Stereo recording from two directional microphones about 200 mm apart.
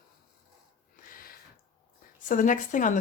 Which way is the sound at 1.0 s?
45° left (ahead or behind).